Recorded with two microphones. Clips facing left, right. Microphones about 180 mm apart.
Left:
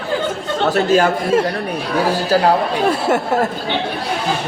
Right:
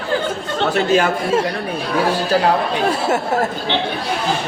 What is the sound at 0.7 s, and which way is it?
Speech, 40° left (ahead or behind).